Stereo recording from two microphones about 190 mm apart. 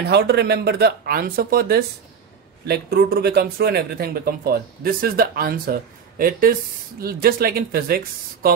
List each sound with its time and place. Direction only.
0.0 s speech: 60° right (ahead or behind)